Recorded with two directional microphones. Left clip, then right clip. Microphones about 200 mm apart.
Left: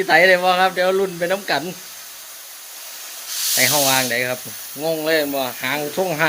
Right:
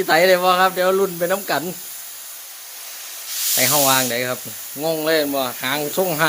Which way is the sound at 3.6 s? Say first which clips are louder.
Even; 20° right (ahead or behind).